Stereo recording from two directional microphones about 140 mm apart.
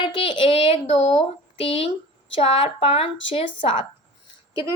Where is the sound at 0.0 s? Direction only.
35° left (ahead or behind).